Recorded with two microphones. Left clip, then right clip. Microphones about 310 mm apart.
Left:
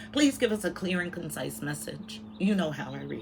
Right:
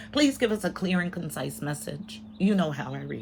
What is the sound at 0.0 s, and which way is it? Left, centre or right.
Speech, right.